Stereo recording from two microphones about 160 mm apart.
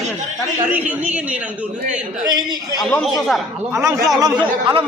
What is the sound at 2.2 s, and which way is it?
Speech, 25° right (ahead or behind).